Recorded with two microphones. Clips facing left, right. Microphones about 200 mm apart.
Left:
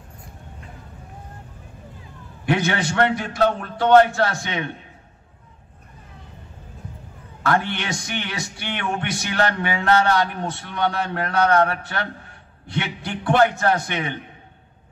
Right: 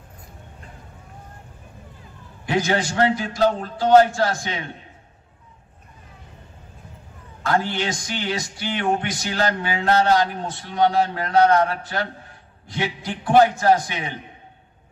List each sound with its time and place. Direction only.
2.4 s a man's voice: 65° left (ahead or behind)
7.4 s a man's voice: 65° left (ahead or behind)